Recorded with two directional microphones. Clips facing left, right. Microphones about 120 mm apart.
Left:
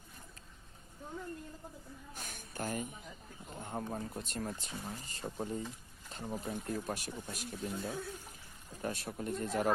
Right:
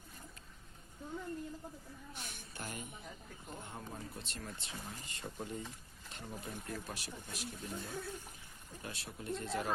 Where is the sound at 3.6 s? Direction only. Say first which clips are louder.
Left 10 dB; 45° left (ahead or behind).